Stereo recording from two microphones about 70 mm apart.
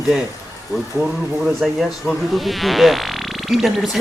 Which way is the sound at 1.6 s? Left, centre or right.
Centre.